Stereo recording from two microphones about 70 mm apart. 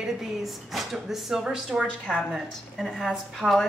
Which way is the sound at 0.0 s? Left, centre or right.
Centre.